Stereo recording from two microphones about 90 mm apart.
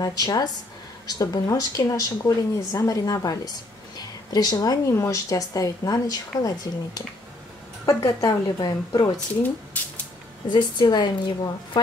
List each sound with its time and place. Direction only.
0.0 s a woman's voice: 45° left (ahead or behind)
4.9 s a woman's voice: 35° left (ahead or behind)
9.8 s speech: 20° left (ahead or behind)
10.5 s a woman's voice: 55° left (ahead or behind)